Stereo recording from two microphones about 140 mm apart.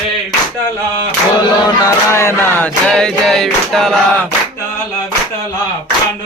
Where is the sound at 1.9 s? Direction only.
20° left (ahead or behind); by 3.9 s 5° left (ahead or behind).